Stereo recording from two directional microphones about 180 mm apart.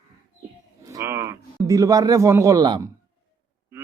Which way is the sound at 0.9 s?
15° right (ahead or behind).